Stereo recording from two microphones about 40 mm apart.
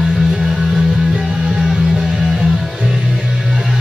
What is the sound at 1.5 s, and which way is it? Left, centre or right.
Music, centre.